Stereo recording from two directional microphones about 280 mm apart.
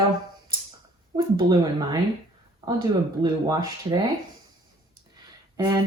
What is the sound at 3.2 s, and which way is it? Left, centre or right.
Speech, centre.